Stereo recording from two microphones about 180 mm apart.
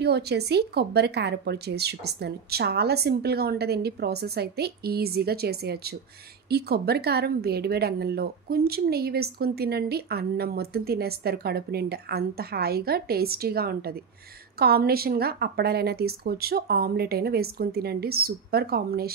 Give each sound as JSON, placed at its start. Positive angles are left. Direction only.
{"t": 0.0, "sound": "speech", "side_deg": -65}